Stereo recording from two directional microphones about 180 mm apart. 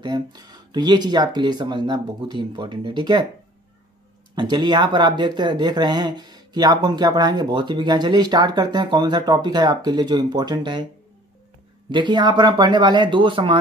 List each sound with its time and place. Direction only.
0.0 s speech: 25° right (ahead or behind)
4.4 s speech: 25° right (ahead or behind)
11.9 s speech: 25° right (ahead or behind)